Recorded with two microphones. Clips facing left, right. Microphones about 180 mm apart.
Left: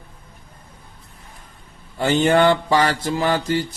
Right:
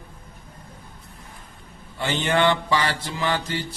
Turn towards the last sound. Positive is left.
turn(degrees=45)  # may be behind; listen again after turning